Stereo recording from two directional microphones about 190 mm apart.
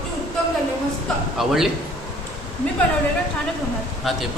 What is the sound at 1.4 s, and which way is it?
Speech, centre (ahead or behind).